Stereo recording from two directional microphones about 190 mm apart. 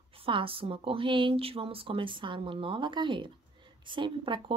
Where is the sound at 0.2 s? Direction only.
30° right (ahead or behind).